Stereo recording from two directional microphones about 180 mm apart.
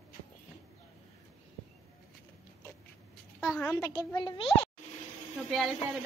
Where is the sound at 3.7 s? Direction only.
15° left (ahead or behind).